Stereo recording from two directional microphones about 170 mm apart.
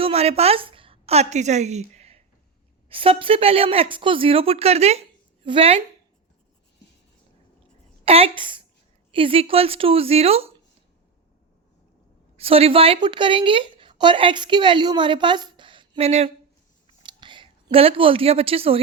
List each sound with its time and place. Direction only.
0.0 s a woman's voice: 35° right (ahead or behind)
8.0 s a woman's voice: 35° right (ahead or behind)
12.4 s a woman's voice: 35° right (ahead or behind)
16.8 s a sound: 30° right (ahead or behind)